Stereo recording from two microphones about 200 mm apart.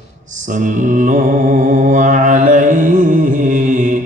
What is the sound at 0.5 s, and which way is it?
Mantra, 40° right (ahead or behind).